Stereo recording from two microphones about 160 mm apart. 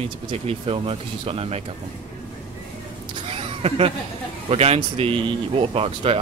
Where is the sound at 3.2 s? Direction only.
40° right (ahead or behind).